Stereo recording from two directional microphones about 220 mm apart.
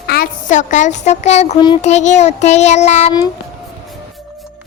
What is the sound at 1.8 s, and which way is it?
Speech, 30° left (ahead or behind).